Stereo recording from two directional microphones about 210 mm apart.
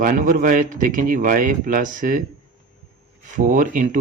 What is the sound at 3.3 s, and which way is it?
Speech, 40° right (ahead or behind).